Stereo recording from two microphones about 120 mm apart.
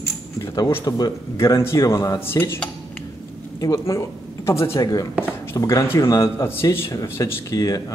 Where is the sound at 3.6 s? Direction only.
30° left (ahead or behind).